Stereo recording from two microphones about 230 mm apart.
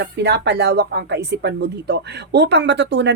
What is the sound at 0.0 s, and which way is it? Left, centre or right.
Speech, right.